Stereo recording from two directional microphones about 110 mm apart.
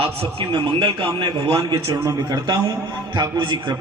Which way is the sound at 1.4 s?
35° right (ahead or behind).